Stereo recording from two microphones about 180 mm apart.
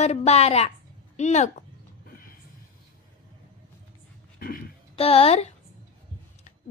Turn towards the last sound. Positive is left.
turn(degrees=35)  # may be behind; listen again after turning